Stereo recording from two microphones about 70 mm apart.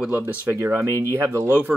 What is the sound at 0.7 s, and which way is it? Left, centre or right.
Speech, right.